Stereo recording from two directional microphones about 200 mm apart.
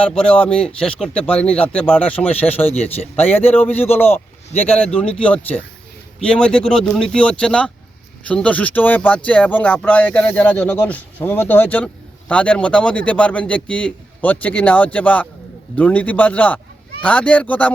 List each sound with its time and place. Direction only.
0.1 s a man's voice: 5° left (ahead or behind)
2.7 s speech: 30° left (ahead or behind)
3.2 s a man's voice: 10° left (ahead or behind)